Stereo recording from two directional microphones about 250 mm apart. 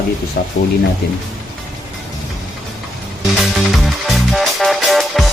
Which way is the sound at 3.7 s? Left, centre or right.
Centre.